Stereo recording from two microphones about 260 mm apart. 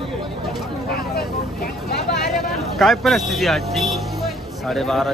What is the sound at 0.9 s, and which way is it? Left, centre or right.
Speech, left.